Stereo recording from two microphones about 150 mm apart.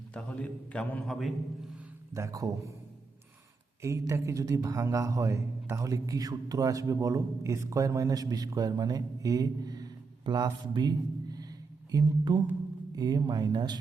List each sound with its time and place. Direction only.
0.1 s a man's voice: 5° left (ahead or behind)
2.1 s speech: 20° right (ahead or behind)
3.8 s speech: 20° right (ahead or behind)